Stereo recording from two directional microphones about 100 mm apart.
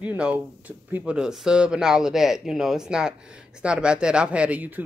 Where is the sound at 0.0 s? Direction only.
10° right (ahead or behind).